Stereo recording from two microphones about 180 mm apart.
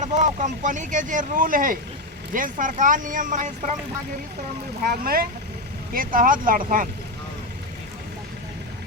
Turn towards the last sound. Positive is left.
turn(degrees=-50)  # may be behind; listen again after turning